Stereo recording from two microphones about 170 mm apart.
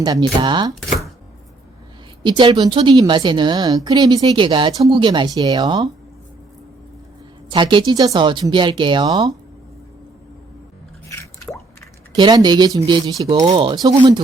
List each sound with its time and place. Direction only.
0.0 s a woman's voice: 25° right (ahead or behind)
2.2 s a woman's voice: 30° right (ahead or behind)
7.5 s a woman's voice: 30° right (ahead or behind)
11.1 s drip: 15° left (ahead or behind)
12.1 s a woman's voice: 25° right (ahead or behind)